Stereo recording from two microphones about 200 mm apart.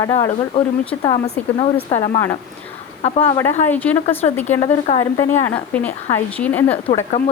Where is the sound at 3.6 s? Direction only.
10° left (ahead or behind).